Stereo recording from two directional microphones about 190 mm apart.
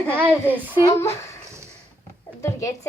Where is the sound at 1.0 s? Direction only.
15° left (ahead or behind).